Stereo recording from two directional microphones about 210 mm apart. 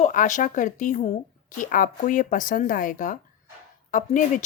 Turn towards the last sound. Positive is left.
turn(degrees=35)  # may be behind; listen again after turning